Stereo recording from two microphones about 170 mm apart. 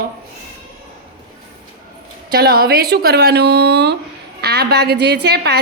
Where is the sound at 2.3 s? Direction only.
65° right (ahead or behind).